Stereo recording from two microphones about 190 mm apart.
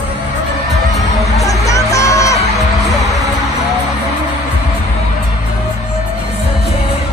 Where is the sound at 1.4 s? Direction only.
15° left (ahead or behind).